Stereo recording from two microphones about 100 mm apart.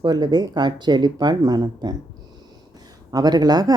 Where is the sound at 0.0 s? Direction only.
45° right (ahead or behind).